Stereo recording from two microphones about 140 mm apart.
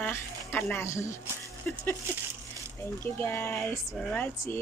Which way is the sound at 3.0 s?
15° left (ahead or behind).